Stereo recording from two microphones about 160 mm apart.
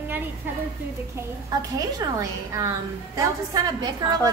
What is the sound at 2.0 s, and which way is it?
A woman's voice, 20° right (ahead or behind).